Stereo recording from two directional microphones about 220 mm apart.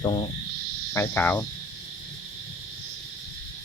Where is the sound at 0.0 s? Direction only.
25° left (ahead or behind).